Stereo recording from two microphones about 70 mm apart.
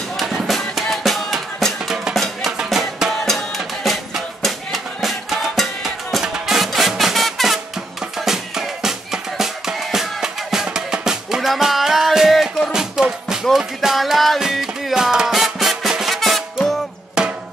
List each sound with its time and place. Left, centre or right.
0.2 s music: centre